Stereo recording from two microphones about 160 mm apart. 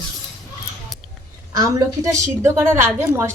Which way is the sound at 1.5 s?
20° right (ahead or behind).